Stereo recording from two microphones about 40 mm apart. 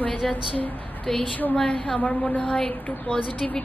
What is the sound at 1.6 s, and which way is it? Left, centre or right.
A woman's voice, left.